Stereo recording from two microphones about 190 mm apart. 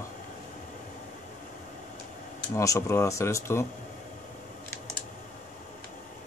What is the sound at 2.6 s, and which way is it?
Speech, 15° left (ahead or behind).